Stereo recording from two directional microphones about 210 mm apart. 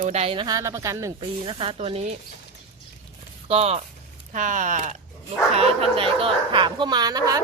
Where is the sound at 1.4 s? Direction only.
25° right (ahead or behind).